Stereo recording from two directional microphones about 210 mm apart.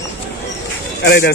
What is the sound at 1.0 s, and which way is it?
Speech, 50° left (ahead or behind).